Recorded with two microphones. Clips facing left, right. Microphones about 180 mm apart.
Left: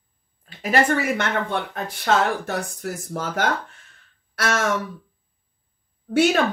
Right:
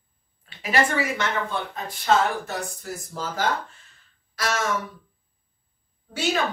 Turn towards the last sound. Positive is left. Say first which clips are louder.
# left 8 dB
turn(degrees=60)  # may be behind; listen again after turning